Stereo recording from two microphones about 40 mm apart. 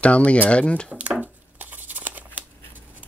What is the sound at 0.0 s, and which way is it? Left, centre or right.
Speech, left.